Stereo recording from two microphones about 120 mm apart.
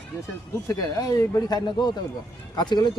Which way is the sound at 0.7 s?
30° left (ahead or behind).